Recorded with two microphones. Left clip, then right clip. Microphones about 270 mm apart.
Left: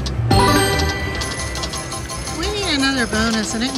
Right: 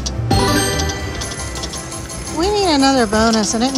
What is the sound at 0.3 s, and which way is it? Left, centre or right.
Music, centre.